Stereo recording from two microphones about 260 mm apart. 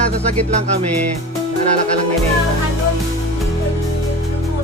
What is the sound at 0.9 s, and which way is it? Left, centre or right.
Music, right.